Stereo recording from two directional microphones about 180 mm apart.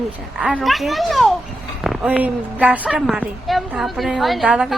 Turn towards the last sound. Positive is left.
turn(degrees=-5)  # may be behind; listen again after turning